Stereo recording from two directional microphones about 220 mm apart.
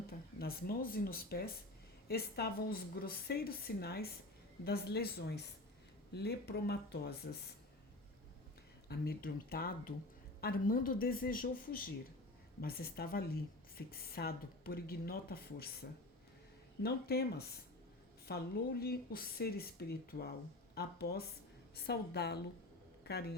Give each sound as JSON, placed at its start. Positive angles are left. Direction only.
{"t": 0.1, "sound": "speech", "side_deg": 45}
{"t": 8.9, "sound": "speech", "side_deg": 45}